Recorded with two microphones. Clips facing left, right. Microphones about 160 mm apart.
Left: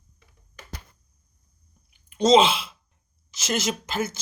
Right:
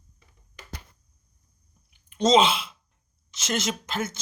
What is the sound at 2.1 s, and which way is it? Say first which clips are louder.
Speech: left 2 dB; 5° left (ahead or behind).